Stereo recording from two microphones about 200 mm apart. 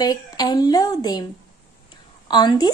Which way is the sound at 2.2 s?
20° left (ahead or behind).